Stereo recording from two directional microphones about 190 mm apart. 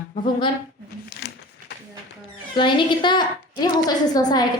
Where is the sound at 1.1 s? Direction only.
55° left (ahead or behind).